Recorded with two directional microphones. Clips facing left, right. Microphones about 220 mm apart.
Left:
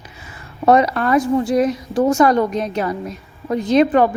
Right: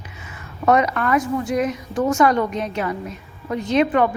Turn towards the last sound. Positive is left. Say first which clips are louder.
# left 4 dB
turn(degrees=35)  # may be behind; listen again after turning